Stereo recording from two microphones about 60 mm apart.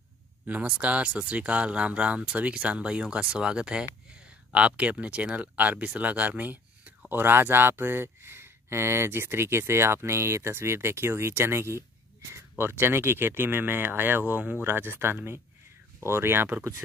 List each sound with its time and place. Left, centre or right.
0.5 s speech: right